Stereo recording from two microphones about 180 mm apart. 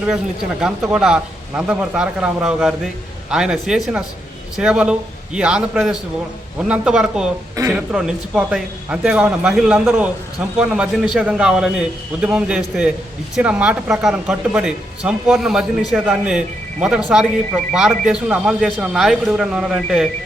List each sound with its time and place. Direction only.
0.9 s speech: 5° right (ahead or behind)
7.5 s speech: 15° right (ahead or behind)
7.9 s speech: 5° right (ahead or behind)